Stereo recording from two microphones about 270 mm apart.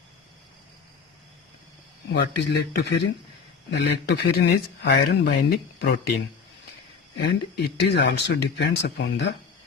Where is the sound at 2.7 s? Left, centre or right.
Left.